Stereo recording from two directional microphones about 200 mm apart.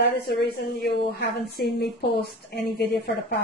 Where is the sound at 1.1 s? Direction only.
55° left (ahead or behind).